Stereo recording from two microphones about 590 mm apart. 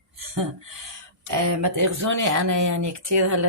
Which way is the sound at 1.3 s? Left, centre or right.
Right.